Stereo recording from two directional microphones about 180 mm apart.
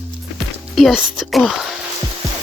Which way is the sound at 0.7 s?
Centre (ahead or behind).